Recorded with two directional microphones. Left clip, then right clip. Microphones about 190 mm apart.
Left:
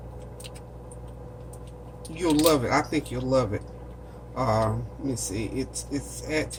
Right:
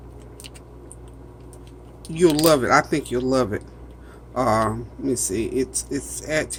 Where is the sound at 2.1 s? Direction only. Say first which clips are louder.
Right 5 dB; 45° right (ahead or behind).